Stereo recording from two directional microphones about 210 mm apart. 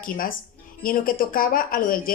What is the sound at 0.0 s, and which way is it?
A woman's voice, 40° left (ahead or behind).